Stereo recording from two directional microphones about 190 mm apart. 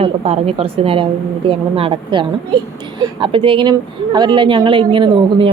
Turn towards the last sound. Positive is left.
turn(degrees=-25)  # may be behind; listen again after turning